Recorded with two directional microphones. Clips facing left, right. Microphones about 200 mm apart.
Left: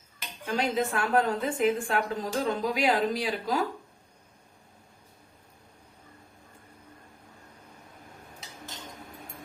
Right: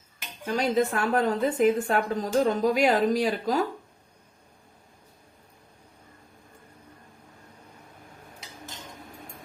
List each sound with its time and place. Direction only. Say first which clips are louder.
0.4 s a woman's voice: right 4 dB; 40° right (ahead or behind)